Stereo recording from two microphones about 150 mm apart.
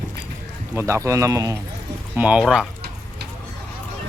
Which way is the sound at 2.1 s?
10° right (ahead or behind).